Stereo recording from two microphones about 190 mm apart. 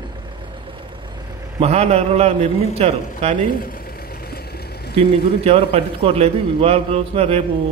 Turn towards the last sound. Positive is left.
turn(degrees=-30)  # may be behind; listen again after turning